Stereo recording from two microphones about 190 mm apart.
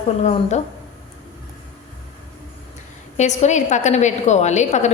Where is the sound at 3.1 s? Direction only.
40° left (ahead or behind).